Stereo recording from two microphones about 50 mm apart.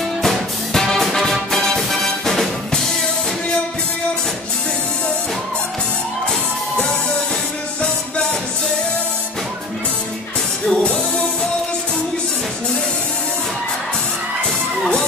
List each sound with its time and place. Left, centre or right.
0.2 s music: centre
10.7 s music: centre